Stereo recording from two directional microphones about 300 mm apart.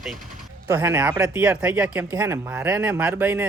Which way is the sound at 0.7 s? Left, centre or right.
Centre.